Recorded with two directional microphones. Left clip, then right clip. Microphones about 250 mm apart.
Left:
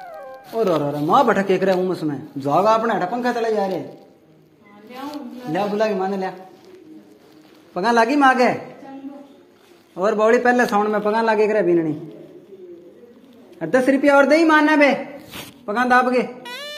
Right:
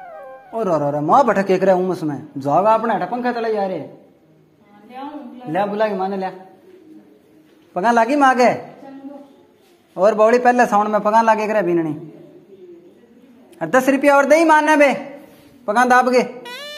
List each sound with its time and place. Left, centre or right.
0.0 s dog: centre
0.6 s a man's voice: right
2.6 s speech: right
5.5 s speech: right
7.7 s a man's voice: right
9.9 s a man's voice: right
13.6 s a man's voice: right
16.4 s a sound: centre